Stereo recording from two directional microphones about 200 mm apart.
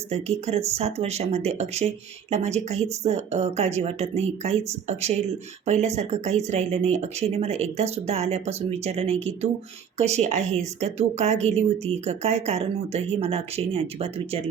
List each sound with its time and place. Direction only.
0.1 s speech: 30° right (ahead or behind)